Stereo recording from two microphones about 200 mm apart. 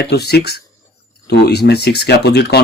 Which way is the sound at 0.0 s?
55° left (ahead or behind).